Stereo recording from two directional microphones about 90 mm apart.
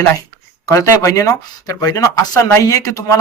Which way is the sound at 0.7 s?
35° left (ahead or behind).